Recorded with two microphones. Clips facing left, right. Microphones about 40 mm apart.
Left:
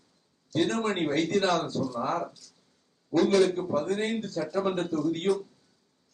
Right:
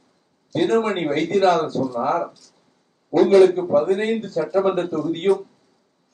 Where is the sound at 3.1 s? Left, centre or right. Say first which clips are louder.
Right 9 dB; right.